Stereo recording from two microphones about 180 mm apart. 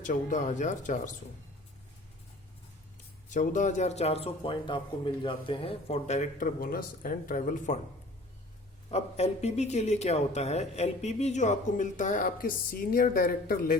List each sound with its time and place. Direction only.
0.0 s speech: 45° left (ahead or behind)
3.2 s speech: 45° left (ahead or behind)
8.9 s speech: 35° left (ahead or behind); by 13.7 s 50° left (ahead or behind)